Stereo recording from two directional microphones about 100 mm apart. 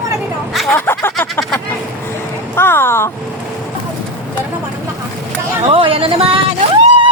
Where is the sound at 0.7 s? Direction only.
25° left (ahead or behind).